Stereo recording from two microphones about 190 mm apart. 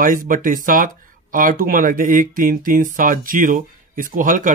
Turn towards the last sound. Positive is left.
turn(degrees=-45)  # may be behind; listen again after turning